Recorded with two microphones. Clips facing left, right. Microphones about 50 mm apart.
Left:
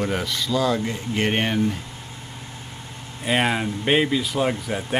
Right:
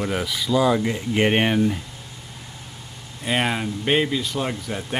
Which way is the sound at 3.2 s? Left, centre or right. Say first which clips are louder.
Left 1 dB; centre.